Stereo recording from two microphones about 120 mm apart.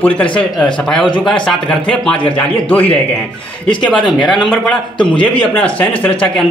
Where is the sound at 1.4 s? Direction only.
5° left (ahead or behind).